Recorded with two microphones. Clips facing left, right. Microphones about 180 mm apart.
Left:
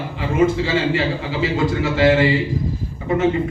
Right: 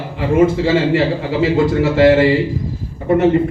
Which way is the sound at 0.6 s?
60° right (ahead or behind).